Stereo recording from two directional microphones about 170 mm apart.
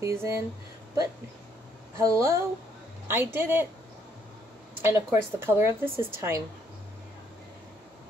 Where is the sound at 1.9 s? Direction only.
15° right (ahead or behind).